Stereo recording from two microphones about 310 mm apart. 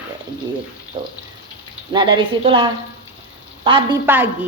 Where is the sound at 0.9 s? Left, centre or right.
Centre.